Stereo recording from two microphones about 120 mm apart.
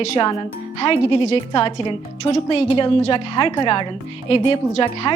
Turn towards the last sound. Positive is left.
turn(degrees=45)  # may be behind; listen again after turning